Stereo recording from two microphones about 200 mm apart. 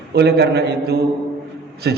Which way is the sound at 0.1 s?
55° right (ahead or behind).